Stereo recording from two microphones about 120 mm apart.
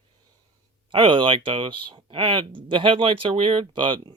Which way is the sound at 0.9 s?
45° right (ahead or behind).